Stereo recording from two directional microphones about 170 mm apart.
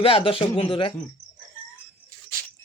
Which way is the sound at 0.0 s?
30° left (ahead or behind).